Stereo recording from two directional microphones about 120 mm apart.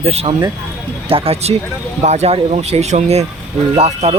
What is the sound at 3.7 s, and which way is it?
Speech, 55° right (ahead or behind).